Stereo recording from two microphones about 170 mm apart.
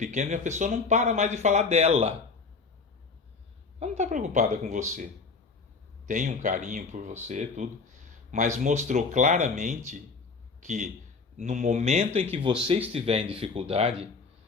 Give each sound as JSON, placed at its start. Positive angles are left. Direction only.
{"t": 0.0, "sound": "speech", "side_deg": -45}
{"t": 3.8, "sound": "speech", "side_deg": -45}
{"t": 6.1, "sound": "speech", "side_deg": -45}